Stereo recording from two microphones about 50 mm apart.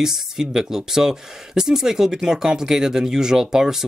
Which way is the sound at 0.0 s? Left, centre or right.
Centre.